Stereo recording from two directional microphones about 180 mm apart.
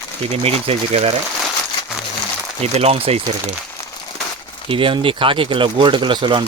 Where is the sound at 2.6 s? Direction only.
35° right (ahead or behind).